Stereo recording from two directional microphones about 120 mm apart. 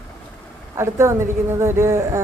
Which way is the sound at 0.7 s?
25° right (ahead or behind).